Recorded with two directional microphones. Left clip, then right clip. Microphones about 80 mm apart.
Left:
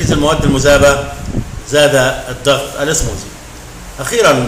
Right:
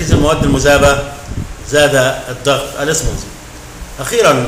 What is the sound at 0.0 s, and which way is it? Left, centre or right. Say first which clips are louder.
A man's voice: even; left.